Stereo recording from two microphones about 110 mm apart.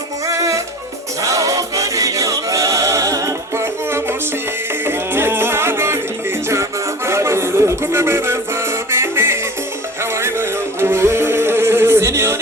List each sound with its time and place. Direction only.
0.3 s music: 30° right (ahead or behind)